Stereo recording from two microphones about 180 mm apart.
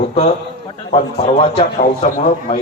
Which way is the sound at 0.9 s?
35° left (ahead or behind).